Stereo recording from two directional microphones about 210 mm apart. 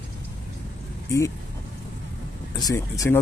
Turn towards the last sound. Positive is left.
turn(degrees=15)  # may be behind; listen again after turning